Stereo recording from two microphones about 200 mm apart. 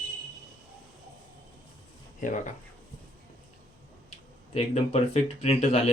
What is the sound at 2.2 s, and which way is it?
Speech, 40° left (ahead or behind).